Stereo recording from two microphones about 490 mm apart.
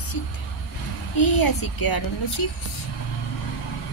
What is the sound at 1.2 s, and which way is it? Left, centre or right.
Speech, left.